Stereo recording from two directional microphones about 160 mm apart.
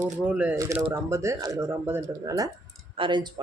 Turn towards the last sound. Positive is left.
turn(degrees=-30)  # may be behind; listen again after turning